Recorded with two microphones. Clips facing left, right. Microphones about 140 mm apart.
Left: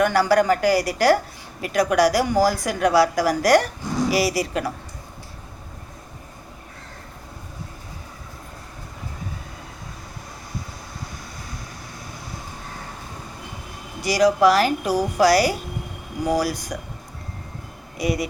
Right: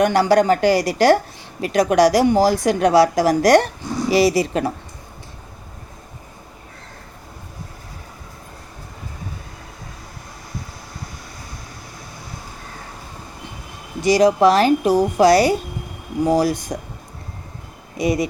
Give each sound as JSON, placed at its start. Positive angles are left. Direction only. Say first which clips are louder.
{"t": 0.0, "sound": "a woman's voice", "louder": "right 3 dB", "side_deg": -20}
{"t": 14.0, "sound": "a woman's voice", "louder": "right 3 dB", "side_deg": -25}
{"t": 17.9, "sound": "speech", "louder": "right 4 dB", "side_deg": -20}